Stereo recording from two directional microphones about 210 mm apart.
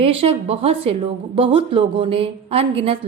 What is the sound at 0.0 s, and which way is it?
A woman's voice, 25° right (ahead or behind).